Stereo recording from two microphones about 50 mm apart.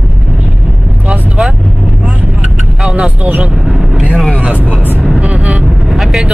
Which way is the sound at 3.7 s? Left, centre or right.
Centre.